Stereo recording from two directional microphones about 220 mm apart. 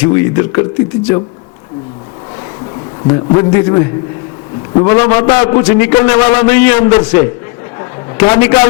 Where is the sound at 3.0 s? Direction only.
15° left (ahead or behind).